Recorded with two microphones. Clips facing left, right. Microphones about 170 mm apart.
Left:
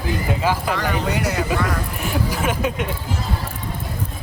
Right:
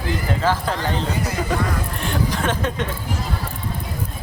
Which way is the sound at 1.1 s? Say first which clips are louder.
Left 3 dB; 75° left (ahead or behind).